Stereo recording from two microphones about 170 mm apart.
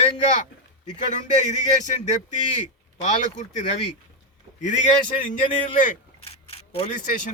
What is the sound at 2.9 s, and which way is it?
Speech, 45° left (ahead or behind).